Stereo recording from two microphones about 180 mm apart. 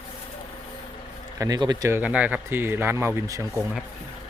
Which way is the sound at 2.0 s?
10° right (ahead or behind).